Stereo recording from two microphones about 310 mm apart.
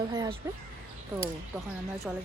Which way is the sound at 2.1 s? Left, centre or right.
Centre.